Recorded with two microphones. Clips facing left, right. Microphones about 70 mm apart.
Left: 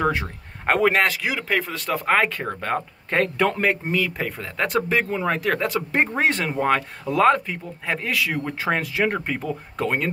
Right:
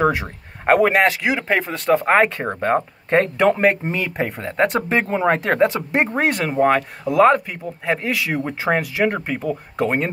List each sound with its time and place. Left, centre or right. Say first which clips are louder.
0.0 s speech: right 4 dB; centre
8.8 s speech: right 3 dB; centre